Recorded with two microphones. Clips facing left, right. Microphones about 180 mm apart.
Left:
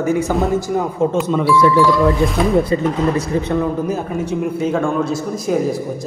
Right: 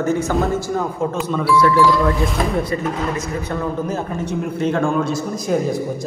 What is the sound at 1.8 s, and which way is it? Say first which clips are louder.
Speech: left 2 dB; centre (ahead or behind).